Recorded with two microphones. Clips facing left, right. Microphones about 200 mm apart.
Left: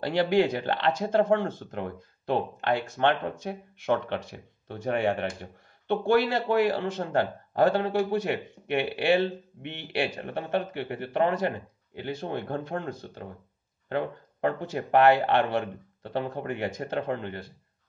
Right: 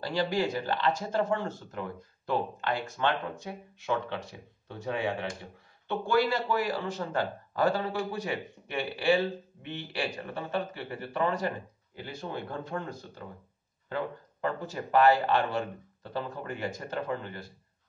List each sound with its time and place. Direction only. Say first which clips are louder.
0.0 s speech: left 6 dB; 60° left (ahead or behind)